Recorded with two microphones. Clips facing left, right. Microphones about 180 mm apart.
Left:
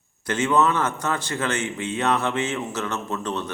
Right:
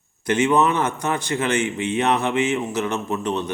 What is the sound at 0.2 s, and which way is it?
A man's voice, 15° right (ahead or behind).